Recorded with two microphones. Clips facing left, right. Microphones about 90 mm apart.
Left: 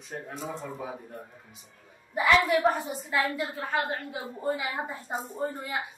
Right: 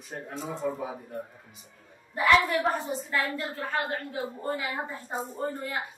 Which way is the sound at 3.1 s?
15° left (ahead or behind).